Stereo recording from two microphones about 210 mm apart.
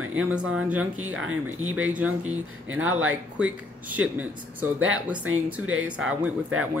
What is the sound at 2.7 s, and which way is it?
Speech, 75° right (ahead or behind).